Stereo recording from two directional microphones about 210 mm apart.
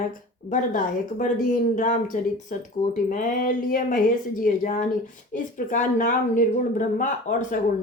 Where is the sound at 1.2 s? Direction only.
35° left (ahead or behind).